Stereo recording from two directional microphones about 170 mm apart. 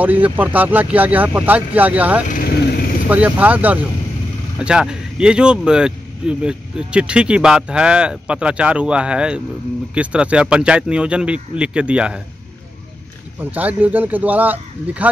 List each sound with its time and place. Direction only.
0.0 s speech: 10° right (ahead or behind)
2.2 s speech: 50° left (ahead or behind)
3.1 s speech: 10° right (ahead or behind)
13.4 s speech: 10° right (ahead or behind)